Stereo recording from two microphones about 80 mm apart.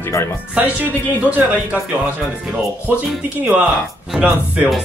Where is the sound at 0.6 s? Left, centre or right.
Right.